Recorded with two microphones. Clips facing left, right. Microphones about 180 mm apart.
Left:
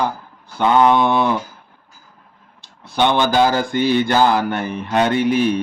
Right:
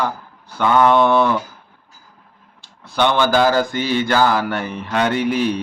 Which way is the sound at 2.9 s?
20° left (ahead or behind).